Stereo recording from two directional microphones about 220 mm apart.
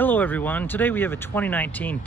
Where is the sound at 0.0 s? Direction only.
10° left (ahead or behind).